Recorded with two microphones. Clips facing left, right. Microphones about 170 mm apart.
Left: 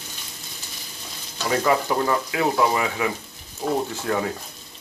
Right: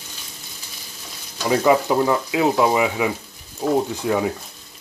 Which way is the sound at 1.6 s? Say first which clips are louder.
Right 4 dB; 15° right (ahead or behind).